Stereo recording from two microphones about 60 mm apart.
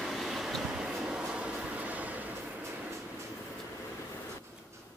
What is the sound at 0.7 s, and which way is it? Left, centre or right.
Train, centre.